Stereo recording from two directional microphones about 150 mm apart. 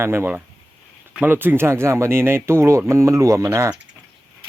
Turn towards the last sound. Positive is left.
turn(degrees=-20)  # may be behind; listen again after turning